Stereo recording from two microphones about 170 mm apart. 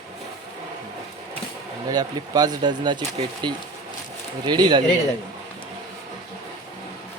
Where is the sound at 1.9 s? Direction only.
20° right (ahead or behind).